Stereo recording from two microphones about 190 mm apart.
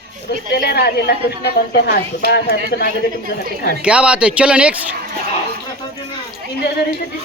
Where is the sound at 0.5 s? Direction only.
60° left (ahead or behind).